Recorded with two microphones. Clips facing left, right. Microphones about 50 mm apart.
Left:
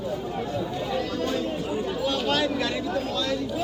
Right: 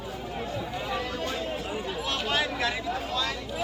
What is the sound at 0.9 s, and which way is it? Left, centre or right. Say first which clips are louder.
Chatter: left 4 dB; right.